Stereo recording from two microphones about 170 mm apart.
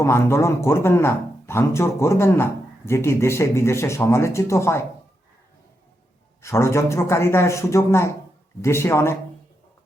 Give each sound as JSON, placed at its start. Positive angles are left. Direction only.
{"t": 0.0, "sound": "speech", "side_deg": 15}
{"t": 6.4, "sound": "speech", "side_deg": 15}